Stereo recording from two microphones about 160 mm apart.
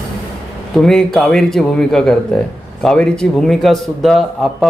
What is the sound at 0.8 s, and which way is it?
A man's voice, 5° left (ahead or behind).